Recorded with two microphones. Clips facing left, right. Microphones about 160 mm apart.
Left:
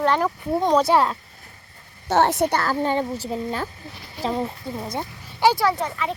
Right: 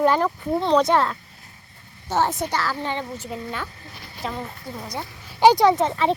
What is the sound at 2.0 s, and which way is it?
Speech, 70° left (ahead or behind).